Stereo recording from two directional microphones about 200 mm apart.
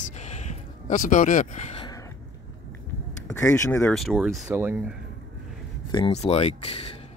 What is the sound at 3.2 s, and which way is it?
Speech, 15° left (ahead or behind).